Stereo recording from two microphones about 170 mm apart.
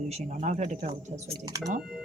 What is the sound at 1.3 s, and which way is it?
Speech, 20° right (ahead or behind).